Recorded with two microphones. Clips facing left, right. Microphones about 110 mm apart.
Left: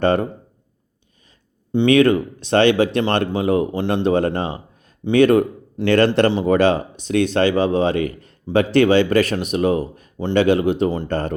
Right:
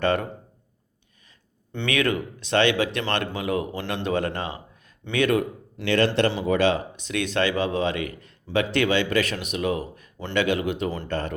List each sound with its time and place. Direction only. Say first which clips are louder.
0.0 s speech: left 6 dB; 35° left (ahead or behind)
1.9 s speech: left 10 dB; 30° left (ahead or behind)